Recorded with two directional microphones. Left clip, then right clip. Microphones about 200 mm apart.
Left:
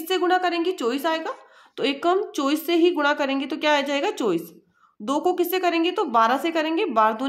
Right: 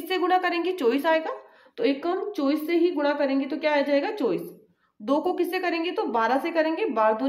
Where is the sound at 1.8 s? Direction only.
45° left (ahead or behind).